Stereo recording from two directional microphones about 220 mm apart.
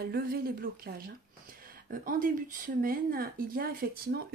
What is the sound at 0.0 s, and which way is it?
A woman's voice, 45° right (ahead or behind).